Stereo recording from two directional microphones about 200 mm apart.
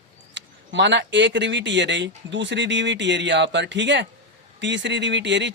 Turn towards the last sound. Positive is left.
turn(degrees=-65)  # may be behind; listen again after turning